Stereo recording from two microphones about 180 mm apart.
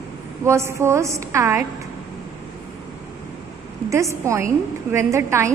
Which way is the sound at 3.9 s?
15° right (ahead or behind).